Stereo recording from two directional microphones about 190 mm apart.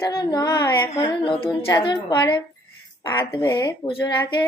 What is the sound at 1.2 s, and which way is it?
Child singing, 25° left (ahead or behind).